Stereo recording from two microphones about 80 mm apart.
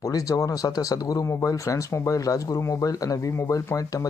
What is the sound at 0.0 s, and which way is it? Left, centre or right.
Speech, left.